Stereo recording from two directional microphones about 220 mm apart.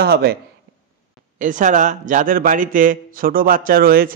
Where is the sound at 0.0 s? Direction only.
45° right (ahead or behind).